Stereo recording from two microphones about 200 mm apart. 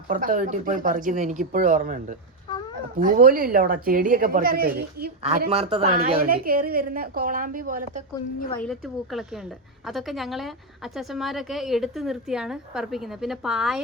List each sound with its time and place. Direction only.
0.1 s a woman's voice: 45° right (ahead or behind)
5.5 s speech: 30° right (ahead or behind)
6.1 s a woman's voice: 50° right (ahead or behind)
8.5 s a woman's voice: centre (ahead or behind)